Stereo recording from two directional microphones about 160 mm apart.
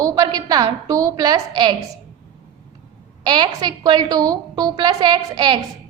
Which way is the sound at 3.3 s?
25° right (ahead or behind).